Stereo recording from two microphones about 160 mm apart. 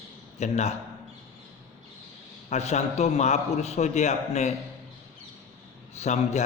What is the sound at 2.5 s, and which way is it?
A man's voice, 45° left (ahead or behind).